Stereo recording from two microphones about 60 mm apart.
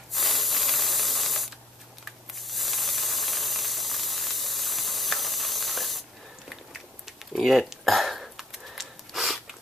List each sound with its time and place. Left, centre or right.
0.1 s rub: centre
2.4 s steam: centre
6.7 s typing: centre